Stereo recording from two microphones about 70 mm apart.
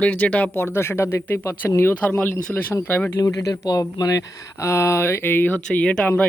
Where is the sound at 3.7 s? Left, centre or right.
Left.